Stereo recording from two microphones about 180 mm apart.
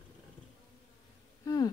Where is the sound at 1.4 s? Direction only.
20° left (ahead or behind).